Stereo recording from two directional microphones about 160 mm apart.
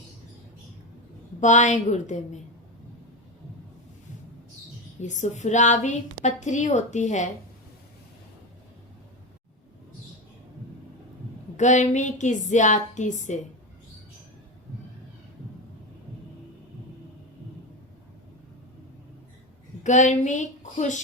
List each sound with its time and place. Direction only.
1.4 s a woman's voice: 50° left (ahead or behind)
5.0 s a woman's voice: 50° left (ahead or behind)
11.5 s a woman's voice: 50° left (ahead or behind)
19.8 s a woman's voice: 50° left (ahead or behind)